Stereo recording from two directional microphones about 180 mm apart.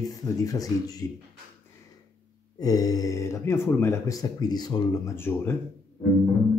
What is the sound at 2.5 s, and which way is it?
Speech, 20° left (ahead or behind).